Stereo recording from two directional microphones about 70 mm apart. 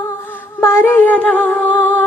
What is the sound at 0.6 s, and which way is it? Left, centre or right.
Music, left.